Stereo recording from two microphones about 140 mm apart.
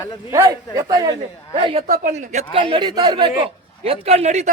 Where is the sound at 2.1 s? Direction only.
55° right (ahead or behind).